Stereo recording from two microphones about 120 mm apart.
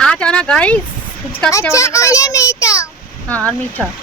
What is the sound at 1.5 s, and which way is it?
A child's voice, 25° left (ahead or behind).